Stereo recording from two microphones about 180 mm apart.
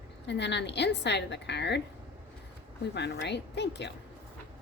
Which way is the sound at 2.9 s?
70° left (ahead or behind).